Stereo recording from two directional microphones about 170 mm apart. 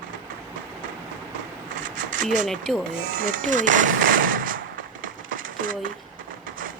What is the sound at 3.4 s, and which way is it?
Machine gun, 50° right (ahead or behind).